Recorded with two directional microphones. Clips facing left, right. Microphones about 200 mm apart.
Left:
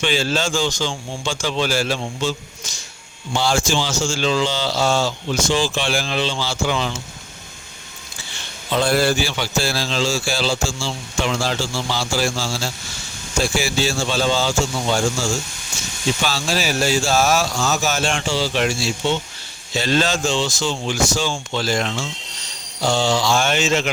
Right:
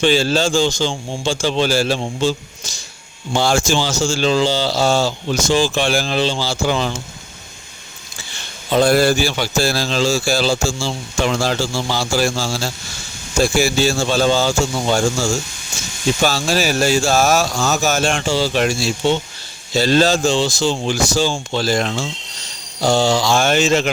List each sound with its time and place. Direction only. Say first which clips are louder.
0.0 s a man's voice: right 5 dB; 35° right (ahead or behind)
3.3 s a man's voice: right 3 dB; 50° right (ahead or behind)
8.7 s a man's voice: right 4 dB; 40° right (ahead or behind)